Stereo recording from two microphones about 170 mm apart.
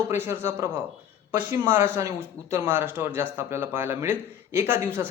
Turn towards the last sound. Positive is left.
turn(degrees=-15)  # may be behind; listen again after turning